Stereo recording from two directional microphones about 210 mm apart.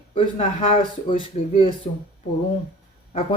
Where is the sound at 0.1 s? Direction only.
25° left (ahead or behind).